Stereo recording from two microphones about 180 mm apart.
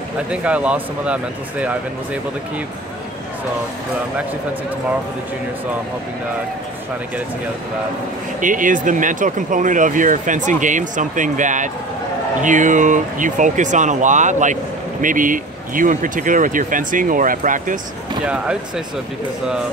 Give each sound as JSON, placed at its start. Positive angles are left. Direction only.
{"t": 0.3, "sound": "speech", "side_deg": -5}
{"t": 8.4, "sound": "speech", "side_deg": -45}
{"t": 18.2, "sound": "speech", "side_deg": -5}